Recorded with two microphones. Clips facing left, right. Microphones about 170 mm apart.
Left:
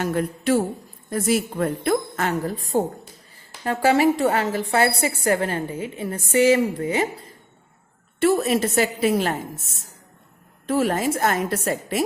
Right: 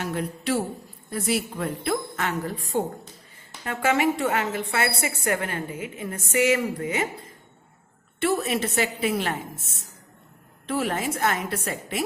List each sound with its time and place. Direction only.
0.0 s a woman's voice: 45° left (ahead or behind)
8.2 s a woman's voice: 40° left (ahead or behind)
10.7 s a woman's voice: 40° left (ahead or behind)